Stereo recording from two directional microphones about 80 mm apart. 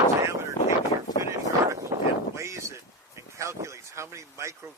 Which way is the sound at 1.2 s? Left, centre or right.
Right.